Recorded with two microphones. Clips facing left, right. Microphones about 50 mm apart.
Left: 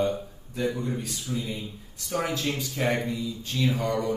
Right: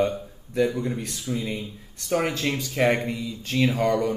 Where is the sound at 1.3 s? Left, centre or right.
Right.